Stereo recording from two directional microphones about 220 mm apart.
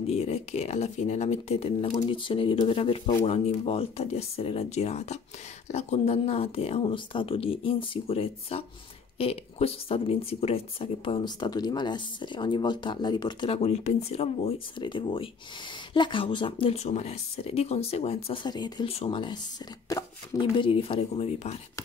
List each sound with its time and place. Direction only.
0.0 s speech: 30° left (ahead or behind)